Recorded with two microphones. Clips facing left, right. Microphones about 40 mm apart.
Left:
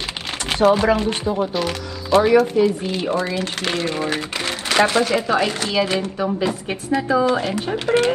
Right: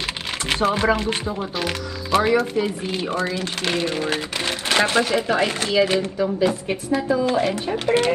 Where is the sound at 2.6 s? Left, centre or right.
Right.